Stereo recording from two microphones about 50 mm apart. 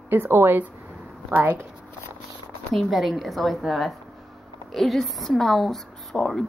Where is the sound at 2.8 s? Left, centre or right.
Centre.